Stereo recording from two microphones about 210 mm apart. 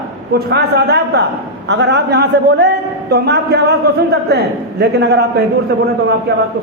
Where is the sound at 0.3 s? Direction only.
50° right (ahead or behind).